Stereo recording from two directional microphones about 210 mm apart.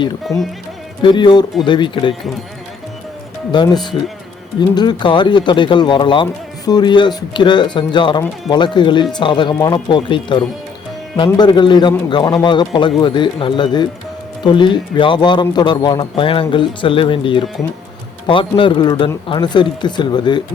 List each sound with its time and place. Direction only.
0.3 s speech: 15° left (ahead or behind)
3.5 s speech: 20° left (ahead or behind)